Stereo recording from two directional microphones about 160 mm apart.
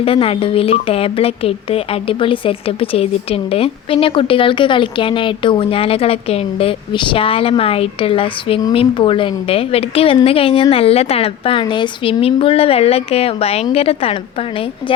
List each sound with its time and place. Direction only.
0.0 s speech: 35° left (ahead or behind)